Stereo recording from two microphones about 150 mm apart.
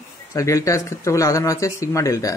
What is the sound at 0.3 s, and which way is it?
Speech, 20° left (ahead or behind).